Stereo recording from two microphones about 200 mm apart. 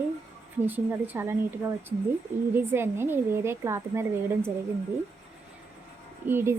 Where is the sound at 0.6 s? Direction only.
10° right (ahead or behind).